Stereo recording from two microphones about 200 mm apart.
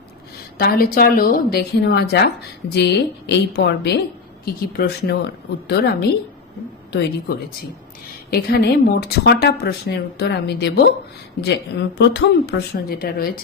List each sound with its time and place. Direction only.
0.6 s a woman's voice: 50° left (ahead or behind)
8.3 s speech: 50° left (ahead or behind)